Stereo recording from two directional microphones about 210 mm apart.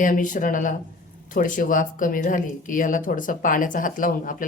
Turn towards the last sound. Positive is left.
turn(degrees=40)  # may be behind; listen again after turning